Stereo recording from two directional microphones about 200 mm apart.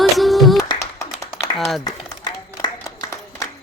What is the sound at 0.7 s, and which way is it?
Clapping, 15° left (ahead or behind).